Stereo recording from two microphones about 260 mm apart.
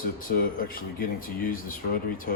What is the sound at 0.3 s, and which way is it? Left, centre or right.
Speech, left.